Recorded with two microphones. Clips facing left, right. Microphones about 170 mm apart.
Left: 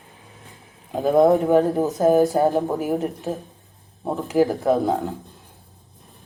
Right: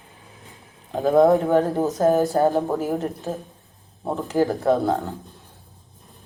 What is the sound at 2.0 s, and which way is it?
A woman's voice, 15° left (ahead or behind).